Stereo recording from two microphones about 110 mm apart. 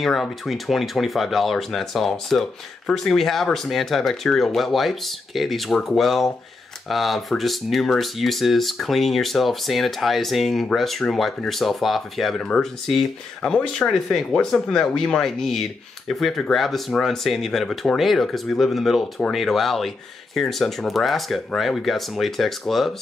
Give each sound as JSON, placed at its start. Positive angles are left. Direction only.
{"t": 0.0, "sound": "speech", "side_deg": 0}